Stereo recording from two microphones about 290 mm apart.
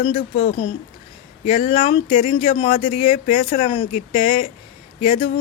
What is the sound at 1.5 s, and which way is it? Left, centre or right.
Speech, left.